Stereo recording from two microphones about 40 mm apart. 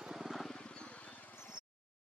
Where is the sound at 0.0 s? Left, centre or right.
Centre.